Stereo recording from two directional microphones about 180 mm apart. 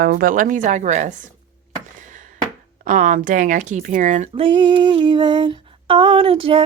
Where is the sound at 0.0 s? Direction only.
55° right (ahead or behind).